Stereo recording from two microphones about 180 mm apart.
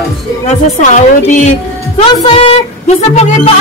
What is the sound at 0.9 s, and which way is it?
Speech, 40° left (ahead or behind).